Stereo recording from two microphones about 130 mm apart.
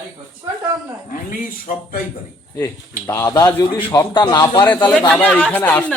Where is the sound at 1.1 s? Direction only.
90° left.